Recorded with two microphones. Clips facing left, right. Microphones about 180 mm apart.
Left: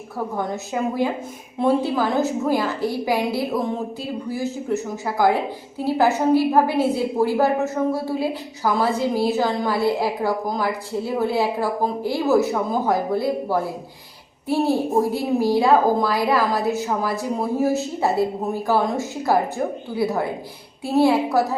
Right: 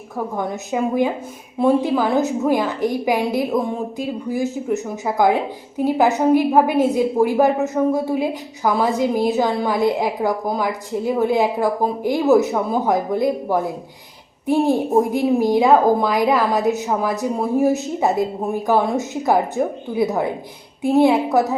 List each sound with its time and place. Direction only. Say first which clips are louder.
0.3 s a woman's voice: right 3 dB; 15° right (ahead or behind)
15.1 s a woman's voice: right 3 dB; 20° right (ahead or behind)